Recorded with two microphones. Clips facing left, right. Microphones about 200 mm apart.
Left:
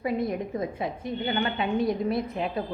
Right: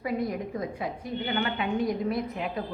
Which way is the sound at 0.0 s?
25° left (ahead or behind).